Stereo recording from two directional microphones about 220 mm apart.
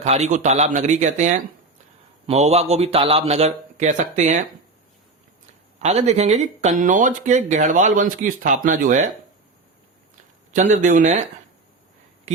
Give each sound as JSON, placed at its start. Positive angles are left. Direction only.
{"t": 0.0, "sound": "a man's voice", "side_deg": -30}
{"t": 5.8, "sound": "speech", "side_deg": -30}
{"t": 10.5, "sound": "speech", "side_deg": -35}